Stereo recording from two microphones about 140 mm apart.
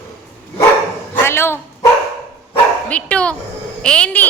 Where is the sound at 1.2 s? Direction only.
15° left (ahead or behind).